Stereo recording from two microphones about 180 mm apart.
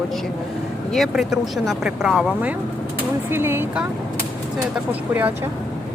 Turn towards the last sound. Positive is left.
turn(degrees=-10)  # may be behind; listen again after turning